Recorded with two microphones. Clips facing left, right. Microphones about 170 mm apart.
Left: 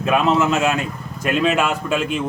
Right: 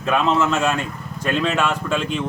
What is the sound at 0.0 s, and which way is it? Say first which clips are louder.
Speech: left 2 dB; 10° left (ahead or behind).